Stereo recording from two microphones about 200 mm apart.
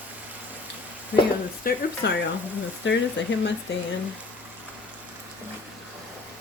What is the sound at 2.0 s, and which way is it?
Speech, 60° left (ahead or behind).